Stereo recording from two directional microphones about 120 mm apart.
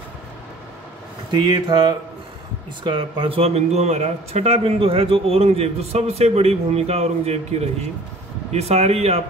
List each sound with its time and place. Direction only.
1.3 s speech: 40° right (ahead or behind); by 9.2 s 60° right (ahead or behind)